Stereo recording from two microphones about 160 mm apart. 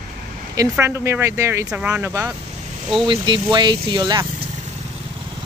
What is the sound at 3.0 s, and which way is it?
Speech, 30° right (ahead or behind).